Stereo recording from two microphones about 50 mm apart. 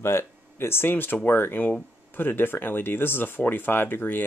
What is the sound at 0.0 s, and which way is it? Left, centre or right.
Speech, left.